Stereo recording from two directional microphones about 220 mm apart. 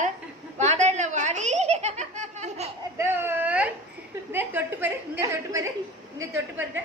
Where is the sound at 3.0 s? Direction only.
10° right (ahead or behind).